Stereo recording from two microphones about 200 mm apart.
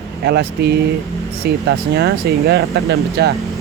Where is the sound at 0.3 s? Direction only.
55° right (ahead or behind).